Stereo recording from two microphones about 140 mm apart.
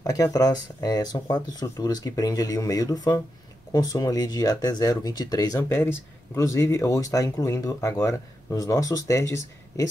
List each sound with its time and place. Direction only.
0.0 s speech: 25° left (ahead or behind)
5.6 s speech: 15° left (ahead or behind)